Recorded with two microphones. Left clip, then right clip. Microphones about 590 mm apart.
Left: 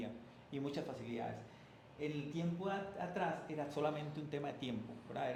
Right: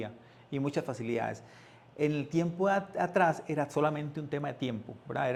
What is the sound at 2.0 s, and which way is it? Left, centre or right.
A man's voice, right.